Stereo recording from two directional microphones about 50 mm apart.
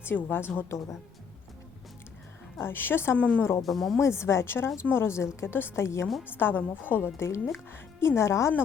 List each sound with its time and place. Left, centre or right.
0.2 s speech: left
2.6 s a woman's voice: left
3.2 s speech: left
3.6 s a woman's voice: centre
4.0 s a woman's voice: left
6.2 s a woman's voice: left
7.2 s a woman's voice: left
7.7 s a woman's voice: left